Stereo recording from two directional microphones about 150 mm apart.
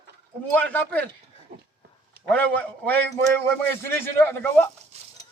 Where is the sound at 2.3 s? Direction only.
10° left (ahead or behind).